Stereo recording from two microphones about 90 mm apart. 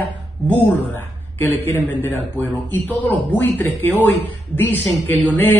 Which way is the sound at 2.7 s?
20° left (ahead or behind).